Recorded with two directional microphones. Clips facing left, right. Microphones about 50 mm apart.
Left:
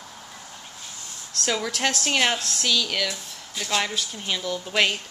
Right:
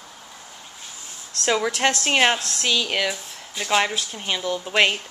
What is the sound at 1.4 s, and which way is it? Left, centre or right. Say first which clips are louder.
A woman's voice: right 4 dB; right.